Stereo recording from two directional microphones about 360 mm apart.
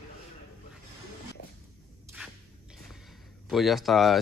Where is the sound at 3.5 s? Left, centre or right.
Centre.